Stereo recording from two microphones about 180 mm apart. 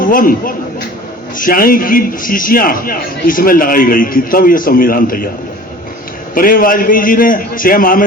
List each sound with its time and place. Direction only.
0.0 s a man's voice: 50° left (ahead or behind)
6.3 s a man's voice: 55° left (ahead or behind)